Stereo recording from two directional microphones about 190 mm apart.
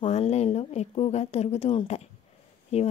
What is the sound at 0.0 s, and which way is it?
A woman's voice, 30° left (ahead or behind).